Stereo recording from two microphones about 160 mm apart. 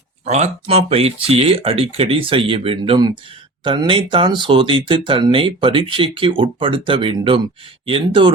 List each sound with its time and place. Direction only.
0.3 s speech: 45° right (ahead or behind)